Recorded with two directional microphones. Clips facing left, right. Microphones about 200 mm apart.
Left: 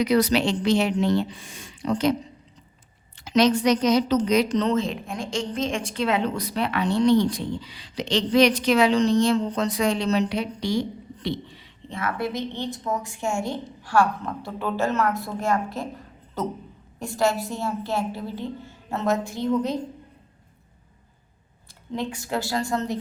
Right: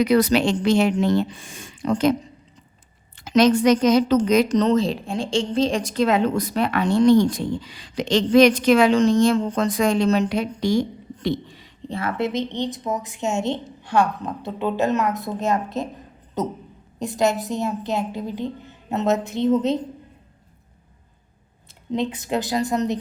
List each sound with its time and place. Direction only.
0.0 s a woman's voice: 55° right (ahead or behind)
3.2 s a woman's voice: 50° right (ahead or behind); by 19.8 s 20° right (ahead or behind)
21.9 s a woman's voice: 20° right (ahead or behind)